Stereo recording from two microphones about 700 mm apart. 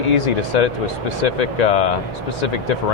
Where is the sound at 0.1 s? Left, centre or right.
Left.